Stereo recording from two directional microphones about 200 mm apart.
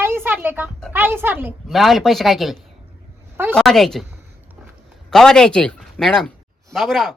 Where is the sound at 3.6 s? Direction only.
Centre (ahead or behind).